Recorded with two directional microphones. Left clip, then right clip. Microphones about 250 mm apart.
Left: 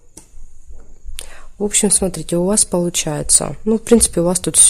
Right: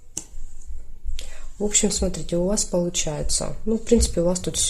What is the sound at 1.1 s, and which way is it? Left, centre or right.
Speech, left.